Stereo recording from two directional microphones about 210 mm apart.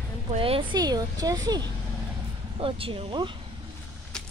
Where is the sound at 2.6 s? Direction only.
25° right (ahead or behind).